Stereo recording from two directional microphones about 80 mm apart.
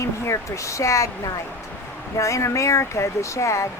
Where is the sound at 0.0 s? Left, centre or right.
Left.